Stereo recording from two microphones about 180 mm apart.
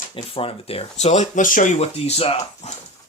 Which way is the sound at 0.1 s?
30° left (ahead or behind).